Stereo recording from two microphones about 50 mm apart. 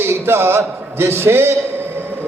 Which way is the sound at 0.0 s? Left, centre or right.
Right.